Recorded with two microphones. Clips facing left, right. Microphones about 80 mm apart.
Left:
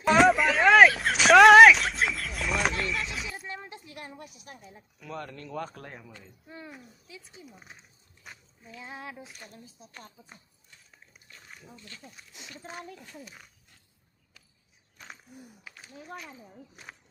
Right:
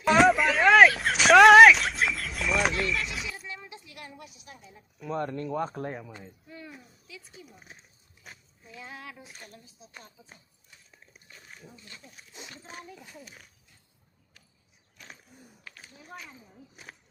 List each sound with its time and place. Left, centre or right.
0.0 s a sound: centre
3.2 s a sound: left
4.3 s a woman's voice: left
5.0 s speech: right
7.1 s a sound: left
8.8 s speech: left
9.8 s speech: left
11.9 s speech: right
15.6 s speech: centre